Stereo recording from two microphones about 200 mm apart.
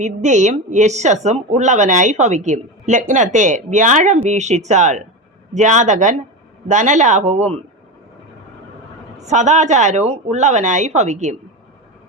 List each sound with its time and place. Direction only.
0.0 s a woman's voice: 35° right (ahead or behind)
9.2 s a woman's voice: 35° right (ahead or behind)